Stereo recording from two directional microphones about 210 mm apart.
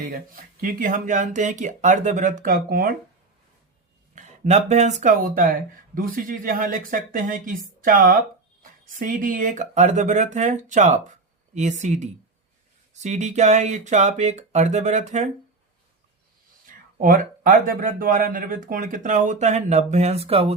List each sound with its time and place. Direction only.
0.6 s speech: 40° right (ahead or behind)
4.1 s speech: 35° right (ahead or behind)
17.0 s speech: 40° right (ahead or behind)